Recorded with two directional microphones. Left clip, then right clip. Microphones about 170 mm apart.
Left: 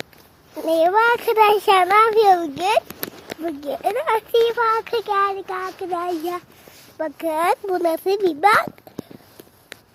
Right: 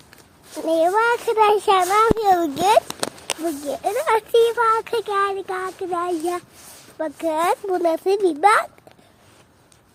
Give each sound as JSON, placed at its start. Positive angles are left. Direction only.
{"t": 0.6, "sound": "a child's voice", "side_deg": 0}
{"t": 2.1, "sound": "speech", "side_deg": -10}
{"t": 4.5, "sound": "speech", "side_deg": 20}
{"t": 4.8, "sound": "speech", "side_deg": 10}
{"t": 7.0, "sound": "a child's voice", "side_deg": 0}